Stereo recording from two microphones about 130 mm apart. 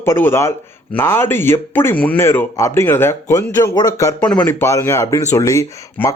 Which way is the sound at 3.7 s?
30° left (ahead or behind).